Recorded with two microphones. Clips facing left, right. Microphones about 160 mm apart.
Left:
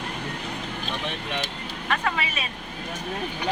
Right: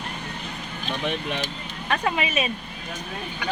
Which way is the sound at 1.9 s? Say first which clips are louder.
Right 3 dB; 20° right (ahead or behind).